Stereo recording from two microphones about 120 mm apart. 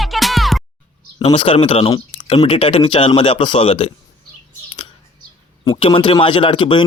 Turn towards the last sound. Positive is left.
turn(degrees=45)  # may be behind; listen again after turning